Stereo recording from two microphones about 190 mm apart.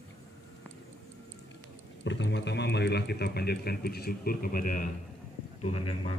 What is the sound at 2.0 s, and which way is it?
A man's voice, 70° left (ahead or behind).